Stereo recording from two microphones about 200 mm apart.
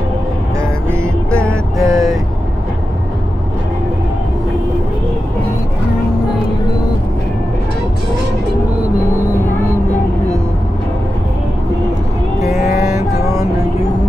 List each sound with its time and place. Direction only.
1.8 s vehicle: 15° right (ahead or behind)